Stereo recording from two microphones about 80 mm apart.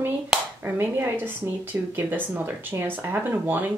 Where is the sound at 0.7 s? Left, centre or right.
Right.